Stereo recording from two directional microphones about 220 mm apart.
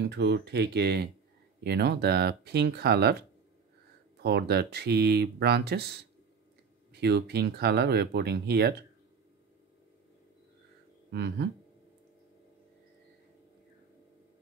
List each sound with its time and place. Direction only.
0.1 s speech: 50° right (ahead or behind)
11.1 s speech: 50° right (ahead or behind)